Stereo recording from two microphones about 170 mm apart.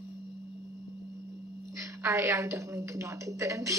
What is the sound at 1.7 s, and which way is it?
A woman's voice, 15° right (ahead or behind).